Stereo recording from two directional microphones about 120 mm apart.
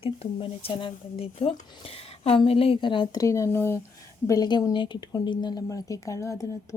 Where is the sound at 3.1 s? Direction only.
25° left (ahead or behind).